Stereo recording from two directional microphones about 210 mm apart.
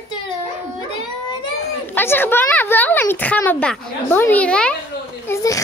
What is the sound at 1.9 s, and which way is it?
A woman's voice, 10° left (ahead or behind).